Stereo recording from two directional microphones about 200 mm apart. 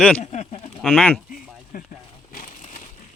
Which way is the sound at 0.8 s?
Centre (ahead or behind).